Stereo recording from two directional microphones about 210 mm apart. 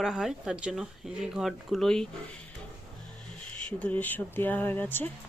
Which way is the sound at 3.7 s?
5° left (ahead or behind).